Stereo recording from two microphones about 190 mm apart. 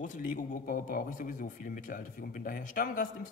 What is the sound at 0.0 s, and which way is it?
A man's voice, 45° left (ahead or behind).